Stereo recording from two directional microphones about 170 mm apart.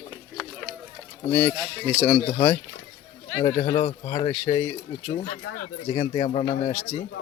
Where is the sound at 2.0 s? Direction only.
25° left (ahead or behind).